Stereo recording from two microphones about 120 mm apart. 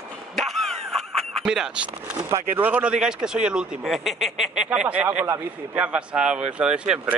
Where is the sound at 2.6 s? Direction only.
10° right (ahead or behind).